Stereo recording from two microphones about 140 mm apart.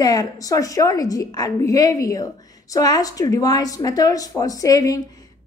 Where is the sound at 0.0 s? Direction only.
25° left (ahead or behind).